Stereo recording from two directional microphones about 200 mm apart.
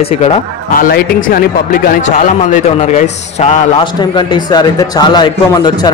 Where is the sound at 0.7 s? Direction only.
45° left (ahead or behind).